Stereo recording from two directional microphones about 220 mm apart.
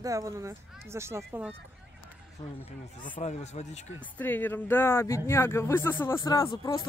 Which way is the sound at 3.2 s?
30° left (ahead or behind).